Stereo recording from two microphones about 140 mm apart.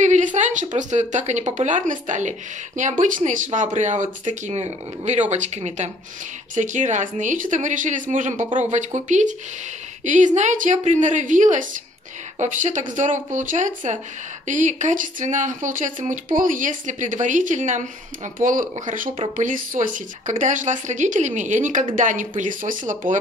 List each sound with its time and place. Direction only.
0.0 s speech: 60° right (ahead or behind)